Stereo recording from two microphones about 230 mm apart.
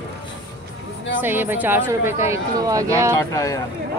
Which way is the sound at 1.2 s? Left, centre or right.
Centre.